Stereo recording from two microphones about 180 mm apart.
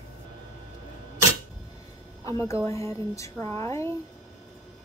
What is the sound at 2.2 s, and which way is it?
A woman's voice, 15° left (ahead or behind).